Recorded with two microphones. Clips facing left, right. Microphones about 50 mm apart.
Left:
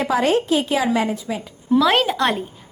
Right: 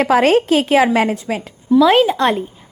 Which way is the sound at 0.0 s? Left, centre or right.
Right.